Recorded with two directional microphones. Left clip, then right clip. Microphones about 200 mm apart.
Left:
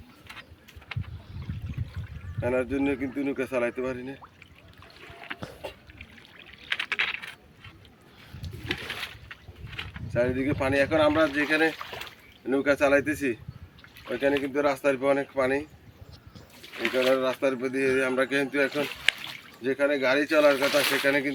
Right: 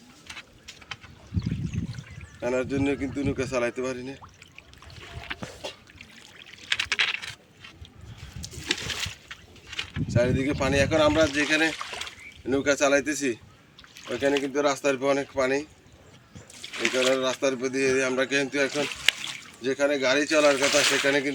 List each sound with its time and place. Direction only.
2.4 s speech: 10° right (ahead or behind)
4.9 s trickle: 10° right (ahead or behind)
8.6 s a sound: 5° right (ahead or behind)
9.6 s speech: centre (ahead or behind)
11.7 s a sound: 15° left (ahead or behind)
12.5 s speech: 5° right (ahead or behind)
20.6 s speech: 20° left (ahead or behind)
21.0 s speech: centre (ahead or behind)